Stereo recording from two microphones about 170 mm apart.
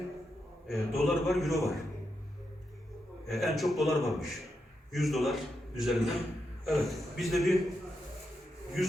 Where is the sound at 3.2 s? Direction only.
Centre (ahead or behind).